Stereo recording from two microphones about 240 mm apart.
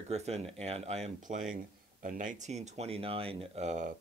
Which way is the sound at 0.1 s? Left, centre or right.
Right.